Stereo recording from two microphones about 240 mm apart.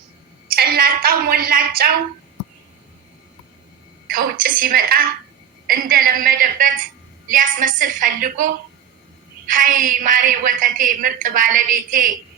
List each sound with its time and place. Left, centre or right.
0.4 s a woman's voice: right
4.1 s a woman's voice: right
9.5 s a woman's voice: right